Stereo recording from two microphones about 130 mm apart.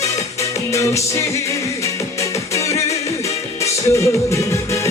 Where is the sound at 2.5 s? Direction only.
25° left (ahead or behind).